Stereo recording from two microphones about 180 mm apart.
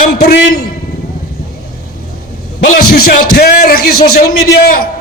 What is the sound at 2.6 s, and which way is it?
A man's voice, 55° left (ahead or behind).